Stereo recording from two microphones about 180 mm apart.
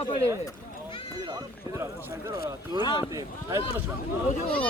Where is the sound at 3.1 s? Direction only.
20° right (ahead or behind).